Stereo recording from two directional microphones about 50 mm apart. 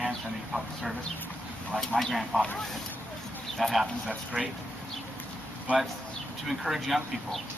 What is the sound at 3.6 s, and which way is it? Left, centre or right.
Speech, centre.